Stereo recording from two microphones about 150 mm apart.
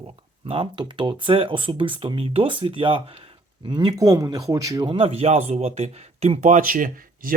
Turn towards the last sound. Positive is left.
turn(degrees=-65)  # may be behind; listen again after turning